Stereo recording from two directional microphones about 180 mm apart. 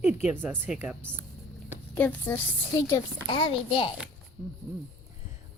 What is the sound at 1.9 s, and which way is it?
A woman's voice, 10° left (ahead or behind).